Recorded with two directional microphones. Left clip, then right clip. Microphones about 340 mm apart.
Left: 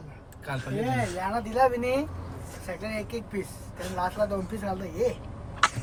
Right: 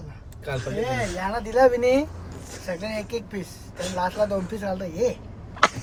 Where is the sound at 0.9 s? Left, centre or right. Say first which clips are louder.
Left 1 dB; right.